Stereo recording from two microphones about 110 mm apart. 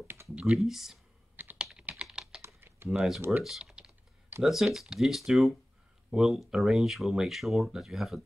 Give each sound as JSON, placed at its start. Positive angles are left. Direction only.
{"t": 0.4, "sound": "speech", "side_deg": -5}
{"t": 1.3, "sound": "typing", "side_deg": -15}
{"t": 1.7, "sound": "computer keyboard", "side_deg": -5}
{"t": 2.4, "sound": "typing", "side_deg": -20}
{"t": 2.9, "sound": "speech", "side_deg": -5}
{"t": 3.4, "sound": "typing", "side_deg": -5}
{"t": 4.4, "sound": "speech", "side_deg": 0}